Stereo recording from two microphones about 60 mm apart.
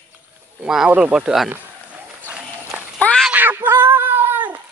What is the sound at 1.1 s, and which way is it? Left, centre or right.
Speech, centre.